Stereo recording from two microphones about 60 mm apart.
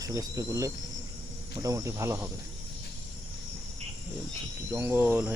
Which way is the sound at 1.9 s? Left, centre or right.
Right.